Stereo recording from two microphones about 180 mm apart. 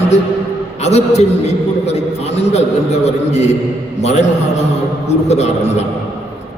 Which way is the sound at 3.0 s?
40° left (ahead or behind).